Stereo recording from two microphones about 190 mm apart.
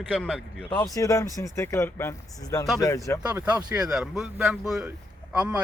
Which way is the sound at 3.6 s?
20° right (ahead or behind).